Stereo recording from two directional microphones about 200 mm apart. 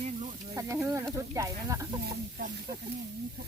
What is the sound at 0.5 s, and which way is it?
Speech, 15° right (ahead or behind).